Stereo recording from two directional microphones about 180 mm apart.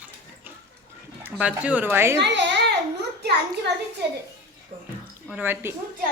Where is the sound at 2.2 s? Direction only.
75° right (ahead or behind).